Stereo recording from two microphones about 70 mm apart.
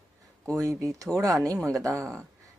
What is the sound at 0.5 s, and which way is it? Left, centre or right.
A woman's voice, right.